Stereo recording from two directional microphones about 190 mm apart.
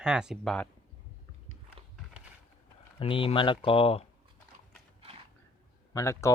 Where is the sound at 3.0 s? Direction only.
30° left (ahead or behind).